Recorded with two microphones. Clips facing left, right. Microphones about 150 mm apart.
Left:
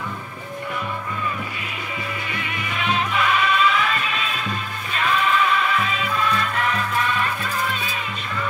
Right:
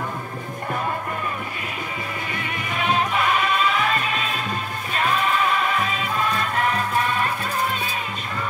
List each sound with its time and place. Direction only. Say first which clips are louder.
2.3 s music: right 1 dB; 45° right (ahead or behind)